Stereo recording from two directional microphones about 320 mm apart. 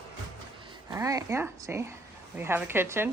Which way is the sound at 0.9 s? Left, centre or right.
Centre.